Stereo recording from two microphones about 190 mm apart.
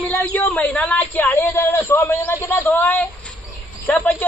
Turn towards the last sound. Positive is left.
turn(degrees=10)  # may be behind; listen again after turning